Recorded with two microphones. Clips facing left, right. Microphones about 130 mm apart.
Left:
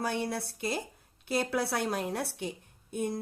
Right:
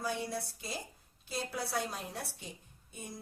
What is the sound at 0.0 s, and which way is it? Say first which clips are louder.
A woman's voice: left 4 dB; 65° left (ahead or behind).